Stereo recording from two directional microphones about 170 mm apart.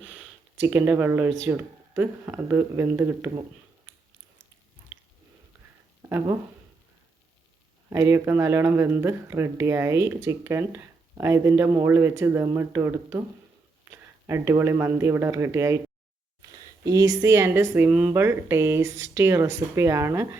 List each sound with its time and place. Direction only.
0.0 s a sound: 10° right (ahead or behind)
0.6 s speech: 15° right (ahead or behind)
6.0 s speech: 15° right (ahead or behind)
7.9 s speech: 15° right (ahead or behind)
16.8 s speech: 20° right (ahead or behind)